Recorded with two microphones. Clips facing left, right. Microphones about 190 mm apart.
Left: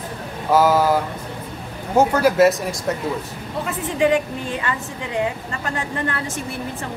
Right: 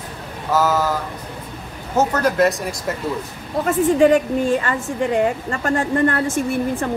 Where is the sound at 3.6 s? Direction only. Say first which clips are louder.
Right 6 dB; 45° right (ahead or behind).